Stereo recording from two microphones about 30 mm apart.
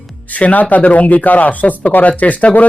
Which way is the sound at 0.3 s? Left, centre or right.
Left.